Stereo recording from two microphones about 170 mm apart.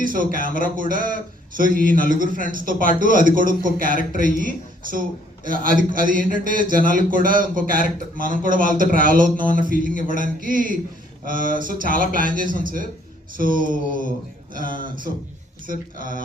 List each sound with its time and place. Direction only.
0.0 s a man's voice: 55° right (ahead or behind)